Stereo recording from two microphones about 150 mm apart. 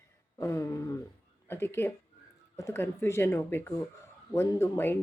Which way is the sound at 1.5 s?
15° left (ahead or behind).